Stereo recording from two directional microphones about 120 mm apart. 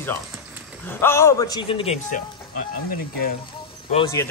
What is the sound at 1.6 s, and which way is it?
Speech, 50° left (ahead or behind).